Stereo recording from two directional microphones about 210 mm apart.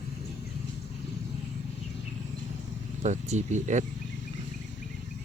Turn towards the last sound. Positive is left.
turn(degrees=-35)  # may be behind; listen again after turning